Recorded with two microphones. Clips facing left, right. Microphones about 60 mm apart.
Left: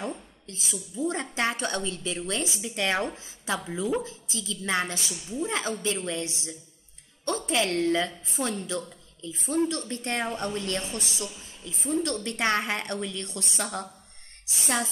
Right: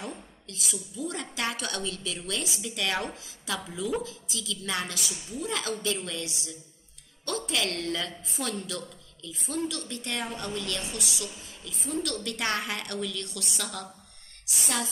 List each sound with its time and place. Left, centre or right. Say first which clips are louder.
0.5 s a woman's voice: left 1 dB; left